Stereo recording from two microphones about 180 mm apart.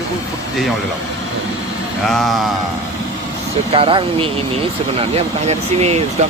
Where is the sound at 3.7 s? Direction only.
30° right (ahead or behind).